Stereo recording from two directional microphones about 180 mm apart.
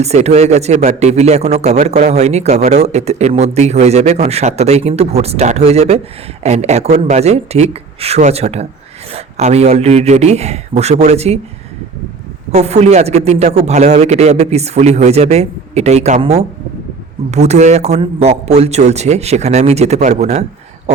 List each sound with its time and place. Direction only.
0.0 s a man's voice: 35° right (ahead or behind)
12.5 s a man's voice: 35° right (ahead or behind)